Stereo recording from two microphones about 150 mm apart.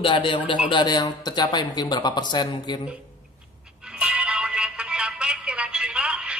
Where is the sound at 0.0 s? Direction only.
35° left (ahead or behind).